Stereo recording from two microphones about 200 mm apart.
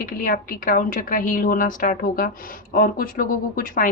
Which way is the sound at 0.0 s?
40° left (ahead or behind).